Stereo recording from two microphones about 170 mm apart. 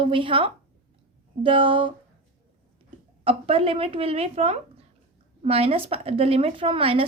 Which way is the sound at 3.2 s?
35° right (ahead or behind).